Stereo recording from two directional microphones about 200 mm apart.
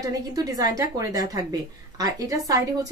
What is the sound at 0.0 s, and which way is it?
A woman's voice, 20° right (ahead or behind).